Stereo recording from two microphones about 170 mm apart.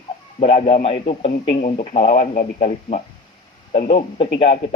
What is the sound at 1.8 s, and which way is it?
A man's voice, 35° left (ahead or behind).